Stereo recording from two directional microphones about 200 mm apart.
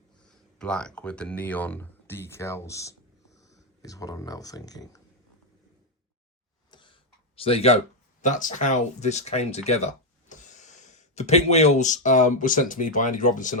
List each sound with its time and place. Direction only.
0.2 s speech: 5° left (ahead or behind)
6.7 s a sound: 25° left (ahead or behind)
8.2 s speech: 40° left (ahead or behind)